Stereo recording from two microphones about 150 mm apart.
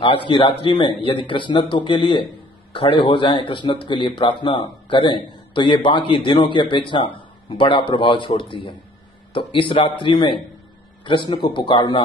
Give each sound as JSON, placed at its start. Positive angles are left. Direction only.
{"t": 0.0, "sound": "a man's voice", "side_deg": 35}